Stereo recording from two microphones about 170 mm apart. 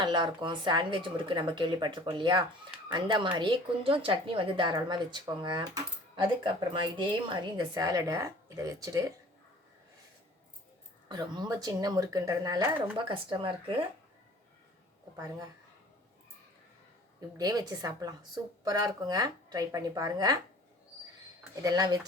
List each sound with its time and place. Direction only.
0.0 s a woman's voice: 25° right (ahead or behind)
11.1 s a woman's voice: 25° right (ahead or behind)
15.1 s a woman's voice: 20° right (ahead or behind)
17.2 s a woman's voice: 25° right (ahead or behind)
21.5 s a woman's voice: 20° right (ahead or behind)